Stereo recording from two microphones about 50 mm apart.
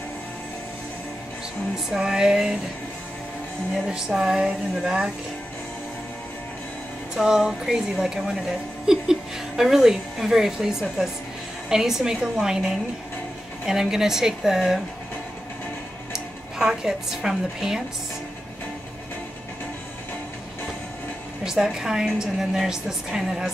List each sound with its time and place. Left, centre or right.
1.9 s a woman's voice: centre
3.9 s a woman's voice: centre
7.2 s a woman's voice: centre
16.1 s a woman's voice: centre
21.5 s a woman's voice: centre